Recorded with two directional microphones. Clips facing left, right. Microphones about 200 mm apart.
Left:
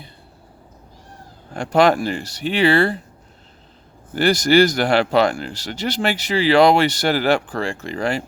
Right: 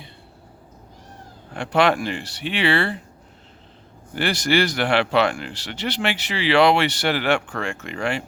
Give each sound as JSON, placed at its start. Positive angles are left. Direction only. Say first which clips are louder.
{"t": 1.5, "sound": "speech", "louder": "left 4 dB", "side_deg": 40}
{"t": 4.1, "sound": "speech", "louder": "left 6 dB", "side_deg": 40}